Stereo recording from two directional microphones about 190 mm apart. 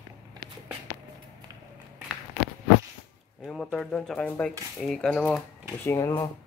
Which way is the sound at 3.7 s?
5° left (ahead or behind).